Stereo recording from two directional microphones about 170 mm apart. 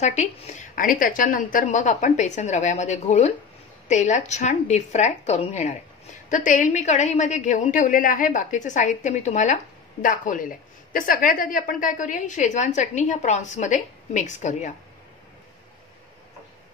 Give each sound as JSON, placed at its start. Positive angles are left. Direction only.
{"t": 0.0, "sound": "a woman's voice", "side_deg": 45}